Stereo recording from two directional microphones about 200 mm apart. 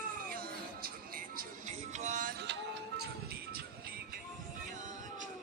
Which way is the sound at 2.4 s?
55° right (ahead or behind).